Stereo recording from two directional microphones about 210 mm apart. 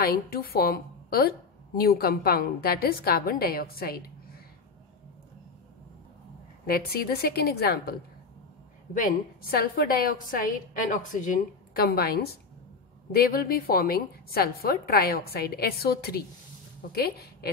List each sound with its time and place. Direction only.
0.0 s a woman's voice: 45° left (ahead or behind)
6.6 s a woman's voice: 45° left (ahead or behind)
8.9 s a woman's voice: 40° left (ahead or behind)